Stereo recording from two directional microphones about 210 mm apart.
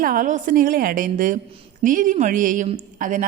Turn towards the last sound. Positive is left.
turn(degrees=-35)  # may be behind; listen again after turning